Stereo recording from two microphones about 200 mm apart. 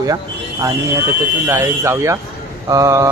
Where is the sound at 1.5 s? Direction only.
15° right (ahead or behind).